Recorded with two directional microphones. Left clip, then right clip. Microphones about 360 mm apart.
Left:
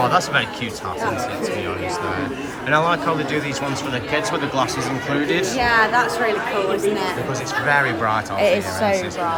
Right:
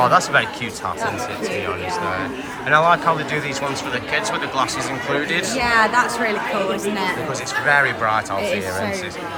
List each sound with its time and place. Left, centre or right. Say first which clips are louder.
0.0 s speech: right 3 dB; centre
2.6 s speech: right 3 dB; centre
5.5 s a woman's voice: right 1 dB; right
7.7 s speech: right 2 dB; centre